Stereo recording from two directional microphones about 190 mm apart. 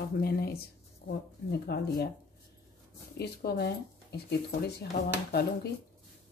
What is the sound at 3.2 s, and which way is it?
Speech, 55° left (ahead or behind).